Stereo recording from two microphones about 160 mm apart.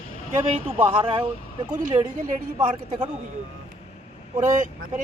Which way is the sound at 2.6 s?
30° right (ahead or behind).